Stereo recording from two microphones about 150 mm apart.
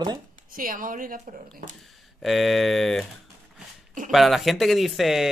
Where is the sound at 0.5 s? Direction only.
65° right (ahead or behind).